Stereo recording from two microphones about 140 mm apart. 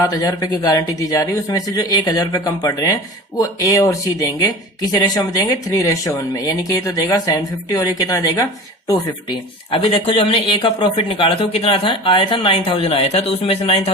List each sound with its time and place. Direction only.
0.0 s speech: 25° left (ahead or behind); by 13.9 s 45° left (ahead or behind)